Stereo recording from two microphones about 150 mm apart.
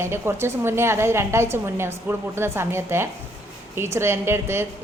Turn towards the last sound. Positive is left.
turn(degrees=-15)  # may be behind; listen again after turning